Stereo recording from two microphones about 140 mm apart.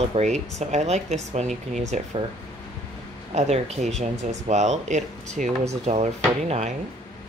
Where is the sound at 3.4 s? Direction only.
50° right (ahead or behind).